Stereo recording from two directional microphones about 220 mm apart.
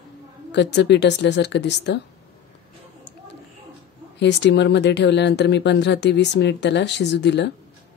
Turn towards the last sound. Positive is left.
turn(degrees=50)  # may be behind; listen again after turning